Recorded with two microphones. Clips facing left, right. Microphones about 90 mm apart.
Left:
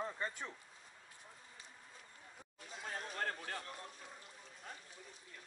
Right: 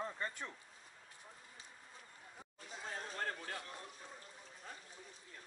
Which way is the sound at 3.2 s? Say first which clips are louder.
Left 1 dB; 40° left (ahead or behind).